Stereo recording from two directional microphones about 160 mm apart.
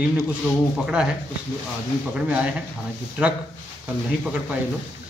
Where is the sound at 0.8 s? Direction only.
5° right (ahead or behind).